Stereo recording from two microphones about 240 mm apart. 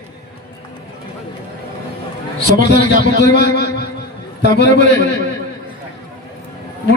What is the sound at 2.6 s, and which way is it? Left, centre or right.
A man's voice, left.